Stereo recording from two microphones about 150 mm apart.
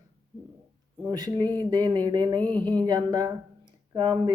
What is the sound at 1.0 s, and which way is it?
Speech, 30° right (ahead or behind).